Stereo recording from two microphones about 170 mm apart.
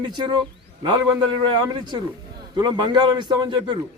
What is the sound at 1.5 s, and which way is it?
A man's voice, 25° right (ahead or behind).